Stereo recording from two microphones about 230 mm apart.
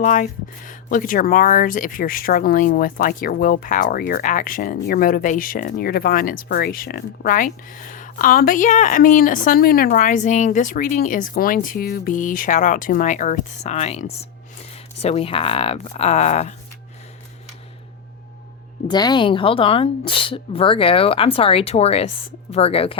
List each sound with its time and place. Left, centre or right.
0.0 s a woman's voice: left
18.9 s a woman's voice: centre